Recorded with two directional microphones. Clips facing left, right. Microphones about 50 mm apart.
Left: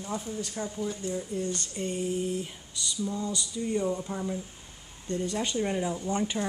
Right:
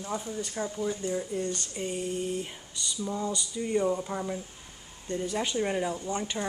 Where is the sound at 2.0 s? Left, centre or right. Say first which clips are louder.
Left 2 dB; centre.